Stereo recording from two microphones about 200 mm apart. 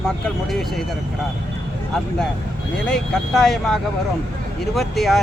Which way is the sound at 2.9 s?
Centre (ahead or behind).